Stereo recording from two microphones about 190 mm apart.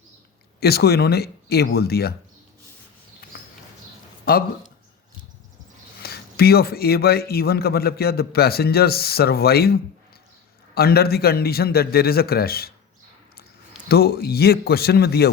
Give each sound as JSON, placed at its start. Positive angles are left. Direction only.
{"t": 0.6, "sound": "a man's voice", "side_deg": 55}
{"t": 4.3, "sound": "speech", "side_deg": 50}
{"t": 6.0, "sound": "a man's voice", "side_deg": 55}
{"t": 10.8, "sound": "a man's voice", "side_deg": 55}
{"t": 13.8, "sound": "a man's voice", "side_deg": 55}